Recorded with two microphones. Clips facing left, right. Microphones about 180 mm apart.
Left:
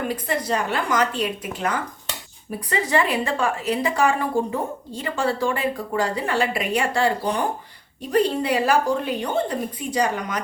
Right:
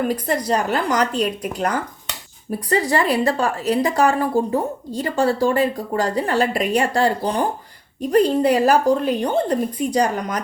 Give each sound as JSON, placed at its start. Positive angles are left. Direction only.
{"t": 0.1, "sound": "a woman's voice", "side_deg": -40}